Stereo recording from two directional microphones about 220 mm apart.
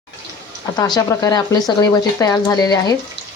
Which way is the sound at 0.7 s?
15° left (ahead or behind).